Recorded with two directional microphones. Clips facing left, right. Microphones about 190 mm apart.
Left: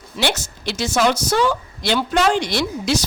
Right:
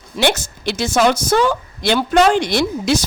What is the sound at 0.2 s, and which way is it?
A woman's voice, 50° right (ahead or behind).